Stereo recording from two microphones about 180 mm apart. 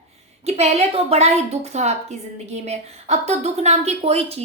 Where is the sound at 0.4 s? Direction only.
35° right (ahead or behind).